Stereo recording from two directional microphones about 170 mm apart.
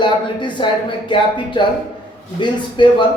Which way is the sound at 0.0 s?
30° left (ahead or behind).